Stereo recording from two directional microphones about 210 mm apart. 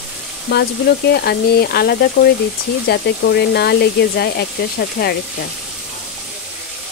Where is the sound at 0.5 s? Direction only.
50° left (ahead or behind).